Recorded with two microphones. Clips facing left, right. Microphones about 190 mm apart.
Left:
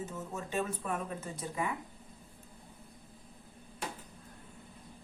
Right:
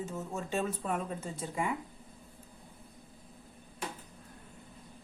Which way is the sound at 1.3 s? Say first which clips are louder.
Right 1 dB; 25° right (ahead or behind).